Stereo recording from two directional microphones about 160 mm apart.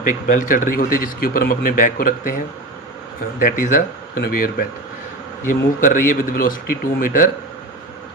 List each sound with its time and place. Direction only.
0.3 s a man's voice: 55° left (ahead or behind)
3.3 s a man's voice: 55° left (ahead or behind)
5.8 s a man's voice: 55° left (ahead or behind)